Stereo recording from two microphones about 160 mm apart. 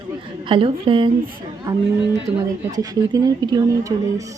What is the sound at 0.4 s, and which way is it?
Speech, 35° right (ahead or behind).